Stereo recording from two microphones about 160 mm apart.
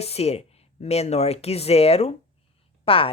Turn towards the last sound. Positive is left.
turn(degrees=35)  # may be behind; listen again after turning